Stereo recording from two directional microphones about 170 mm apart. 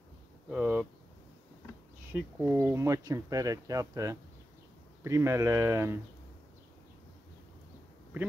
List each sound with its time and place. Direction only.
0.5 s speech: 10° right (ahead or behind)
2.1 s speech: 10° right (ahead or behind)